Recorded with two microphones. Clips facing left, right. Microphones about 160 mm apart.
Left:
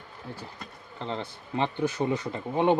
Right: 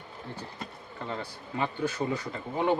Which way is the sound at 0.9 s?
25° left (ahead or behind).